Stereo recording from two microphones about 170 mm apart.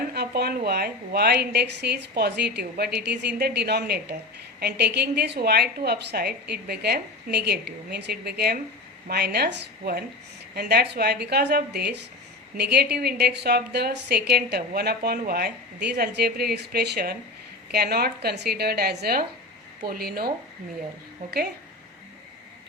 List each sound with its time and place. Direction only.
0.1 s a woman's voice: 70° right (ahead or behind)